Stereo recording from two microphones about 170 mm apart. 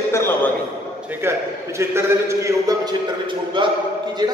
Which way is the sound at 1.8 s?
15° right (ahead or behind).